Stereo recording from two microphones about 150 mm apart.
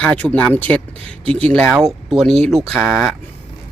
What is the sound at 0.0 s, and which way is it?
Speech, 10° left (ahead or behind).